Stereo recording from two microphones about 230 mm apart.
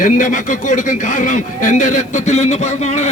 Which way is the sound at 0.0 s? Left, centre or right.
Left.